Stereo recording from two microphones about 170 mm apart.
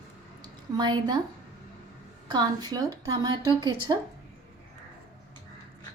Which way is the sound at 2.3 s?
25° right (ahead or behind).